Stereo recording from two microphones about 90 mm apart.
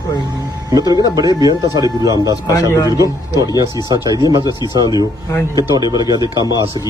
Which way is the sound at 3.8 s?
50° right (ahead or behind).